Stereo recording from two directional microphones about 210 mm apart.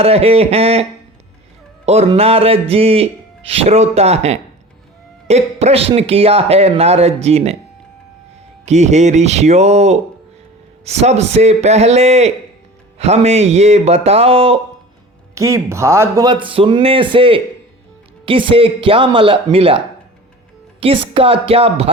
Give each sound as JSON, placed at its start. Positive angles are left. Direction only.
{"t": 0.0, "sound": "speech", "side_deg": -30}
{"t": 8.6, "sound": "speech", "side_deg": -30}
{"t": 15.4, "sound": "speech", "side_deg": -15}
{"t": 20.8, "sound": "speech", "side_deg": -25}